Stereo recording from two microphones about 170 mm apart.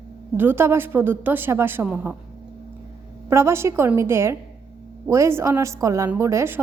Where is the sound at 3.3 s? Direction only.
15° right (ahead or behind).